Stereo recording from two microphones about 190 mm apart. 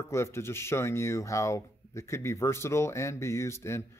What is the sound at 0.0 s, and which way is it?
Speech, 15° left (ahead or behind).